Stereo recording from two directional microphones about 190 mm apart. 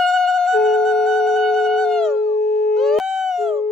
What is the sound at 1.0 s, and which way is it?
Busy signal, centre (ahead or behind).